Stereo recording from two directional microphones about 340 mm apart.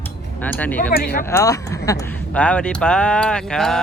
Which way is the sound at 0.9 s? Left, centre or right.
Left.